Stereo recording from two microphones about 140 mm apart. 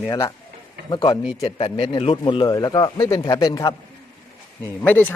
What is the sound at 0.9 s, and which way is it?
A man's voice, 35° left (ahead or behind).